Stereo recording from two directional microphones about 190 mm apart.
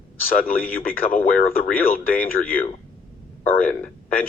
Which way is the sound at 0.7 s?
50° left (ahead or behind).